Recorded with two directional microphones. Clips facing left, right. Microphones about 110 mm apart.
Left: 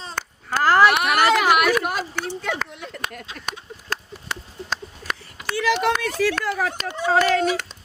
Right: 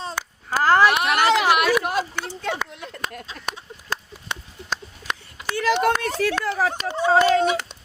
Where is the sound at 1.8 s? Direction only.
15° right (ahead or behind).